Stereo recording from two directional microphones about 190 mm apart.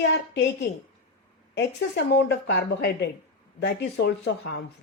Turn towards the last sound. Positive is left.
turn(degrees=60)  # may be behind; listen again after turning